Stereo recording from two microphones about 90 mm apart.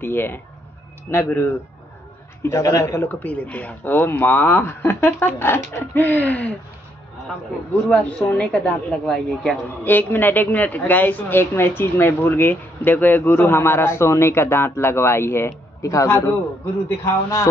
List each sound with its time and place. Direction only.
0.0 s speech: 25° left (ahead or behind)
2.4 s speech: 35° left (ahead or behind); by 6.5 s 20° left (ahead or behind)
7.9 s a woman's voice: 20° left (ahead or behind)
9.8 s a man's voice: 20° left (ahead or behind)